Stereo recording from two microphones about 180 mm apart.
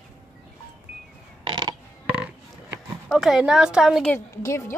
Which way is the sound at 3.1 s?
Centre (ahead or behind).